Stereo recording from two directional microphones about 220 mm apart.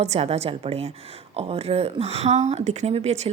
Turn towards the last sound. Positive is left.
turn(degrees=-30)  # may be behind; listen again after turning